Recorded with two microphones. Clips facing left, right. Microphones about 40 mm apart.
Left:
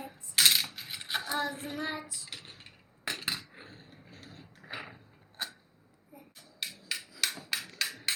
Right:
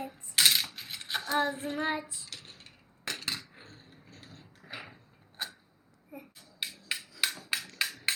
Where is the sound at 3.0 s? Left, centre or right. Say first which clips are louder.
Left 1 dB; centre.